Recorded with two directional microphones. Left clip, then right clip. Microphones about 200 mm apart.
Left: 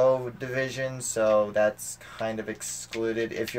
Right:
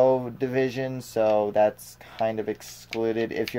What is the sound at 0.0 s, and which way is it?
Speech, 35° right (ahead or behind).